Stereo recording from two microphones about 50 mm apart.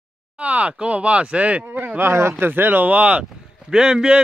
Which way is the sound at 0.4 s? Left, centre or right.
Right.